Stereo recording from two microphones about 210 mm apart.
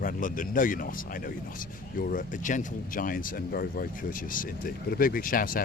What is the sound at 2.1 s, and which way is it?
Speech, 40° left (ahead or behind).